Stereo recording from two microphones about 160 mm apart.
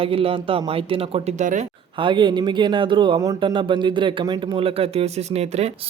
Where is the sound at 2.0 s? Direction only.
30° right (ahead or behind).